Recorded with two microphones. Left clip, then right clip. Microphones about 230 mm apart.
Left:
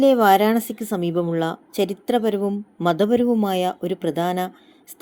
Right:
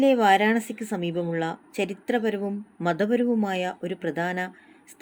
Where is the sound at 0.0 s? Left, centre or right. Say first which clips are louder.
Left 4 dB; left.